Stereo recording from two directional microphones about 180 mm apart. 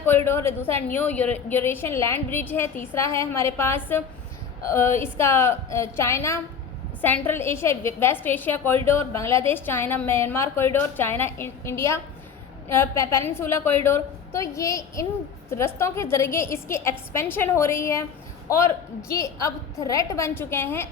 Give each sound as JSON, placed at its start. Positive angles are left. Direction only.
{"t": 0.3, "sound": "a woman's voice", "side_deg": 15}